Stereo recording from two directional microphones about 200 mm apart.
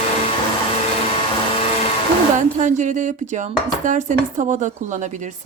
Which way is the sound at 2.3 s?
40° right (ahead or behind).